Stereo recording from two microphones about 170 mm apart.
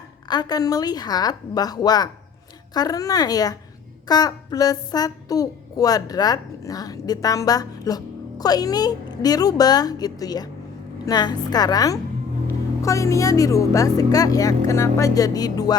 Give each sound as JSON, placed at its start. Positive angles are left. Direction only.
{"t": 0.3, "sound": "speech", "side_deg": 25}